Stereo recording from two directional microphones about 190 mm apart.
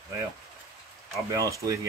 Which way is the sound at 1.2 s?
15° right (ahead or behind).